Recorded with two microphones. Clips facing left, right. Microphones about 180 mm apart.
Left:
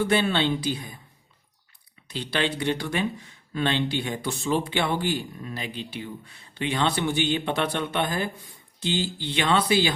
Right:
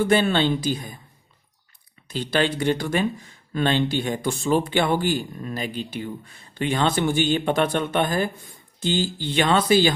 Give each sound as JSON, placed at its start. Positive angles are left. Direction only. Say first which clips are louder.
{"t": 0.1, "sound": "speech", "louder": "right 3 dB", "side_deg": -45}
{"t": 2.0, "sound": "speech", "louder": "right 4 dB", "side_deg": -45}